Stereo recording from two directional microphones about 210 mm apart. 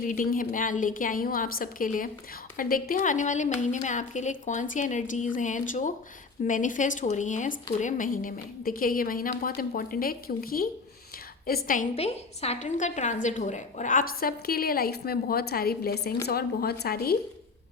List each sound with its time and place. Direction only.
0.0 s a woman's voice: 40° left (ahead or behind)